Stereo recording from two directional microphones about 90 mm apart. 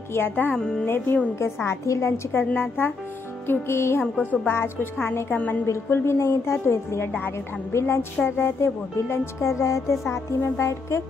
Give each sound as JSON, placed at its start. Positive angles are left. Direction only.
{"t": 0.1, "sound": "a woman's voice", "side_deg": 20}
{"t": 0.6, "sound": "speech", "side_deg": 10}
{"t": 0.8, "sound": "a woman's voice", "side_deg": 25}
{"t": 5.7, "sound": "a woman's voice", "side_deg": 30}
{"t": 8.3, "sound": "music", "side_deg": 25}